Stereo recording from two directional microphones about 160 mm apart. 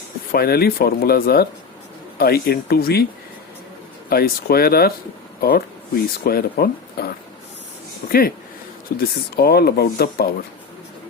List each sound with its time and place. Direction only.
0.3 s speech: 75° left (ahead or behind)
4.1 s speech: 75° left (ahead or behind)
9.0 s speech: 75° left (ahead or behind)